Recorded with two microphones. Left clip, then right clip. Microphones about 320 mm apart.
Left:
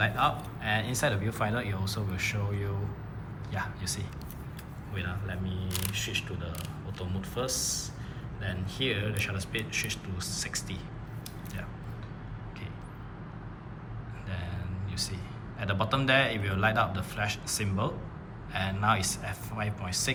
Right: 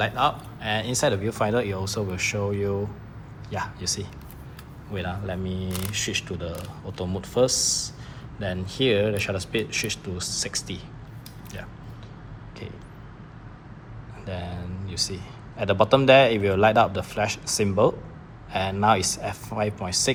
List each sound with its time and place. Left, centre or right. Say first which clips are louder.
0.0 s speech: right 4 dB; centre
14.3 s a man's voice: right 8 dB; centre